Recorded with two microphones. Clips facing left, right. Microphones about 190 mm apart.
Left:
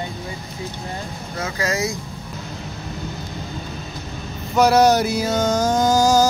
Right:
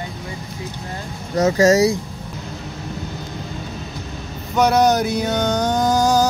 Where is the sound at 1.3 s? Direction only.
40° right (ahead or behind).